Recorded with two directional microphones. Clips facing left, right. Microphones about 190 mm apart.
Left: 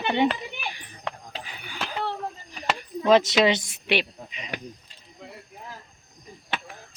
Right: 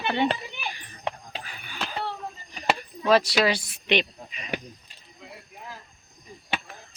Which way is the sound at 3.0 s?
20° left (ahead or behind).